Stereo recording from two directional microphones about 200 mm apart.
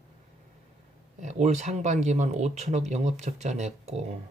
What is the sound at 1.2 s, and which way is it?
Speech, 35° right (ahead or behind).